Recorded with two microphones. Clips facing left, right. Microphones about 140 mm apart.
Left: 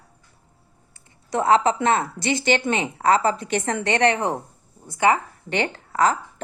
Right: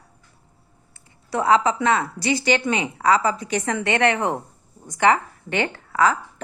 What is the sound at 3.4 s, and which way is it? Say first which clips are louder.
Speech: even; 55° left (ahead or behind).